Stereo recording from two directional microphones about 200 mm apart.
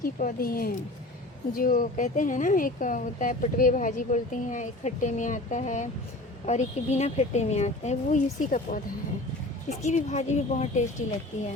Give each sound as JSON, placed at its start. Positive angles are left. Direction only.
{"t": 0.0, "sound": "speech", "side_deg": 45}
{"t": 9.8, "sound": "speech", "side_deg": 35}